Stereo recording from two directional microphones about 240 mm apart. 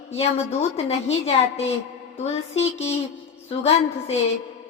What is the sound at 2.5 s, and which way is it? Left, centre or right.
A woman's voice, left.